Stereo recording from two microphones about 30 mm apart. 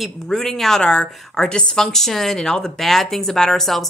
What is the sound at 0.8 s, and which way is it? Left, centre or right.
Speech, left.